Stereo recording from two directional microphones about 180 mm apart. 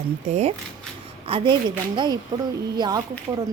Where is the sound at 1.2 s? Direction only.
30° right (ahead or behind).